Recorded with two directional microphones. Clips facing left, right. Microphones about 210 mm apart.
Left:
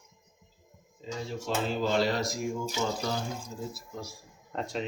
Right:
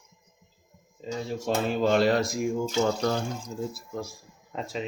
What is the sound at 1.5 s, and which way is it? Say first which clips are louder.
Speech: right 5 dB; 55° right (ahead or behind).